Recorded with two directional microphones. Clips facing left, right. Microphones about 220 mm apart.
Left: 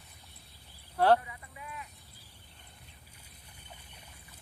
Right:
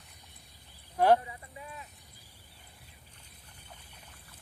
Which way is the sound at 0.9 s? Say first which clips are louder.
Right 1 dB; 10° right (ahead or behind).